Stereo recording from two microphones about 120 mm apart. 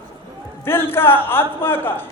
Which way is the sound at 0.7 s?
20° left (ahead or behind).